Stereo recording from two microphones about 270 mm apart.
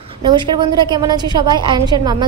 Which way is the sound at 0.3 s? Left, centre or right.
Centre.